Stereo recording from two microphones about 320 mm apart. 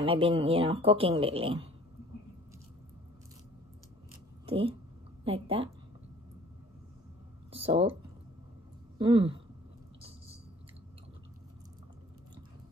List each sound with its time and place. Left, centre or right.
0.0 s speech: centre
4.5 s a woman's voice: centre
7.5 s a sound: centre
8.9 s speech: centre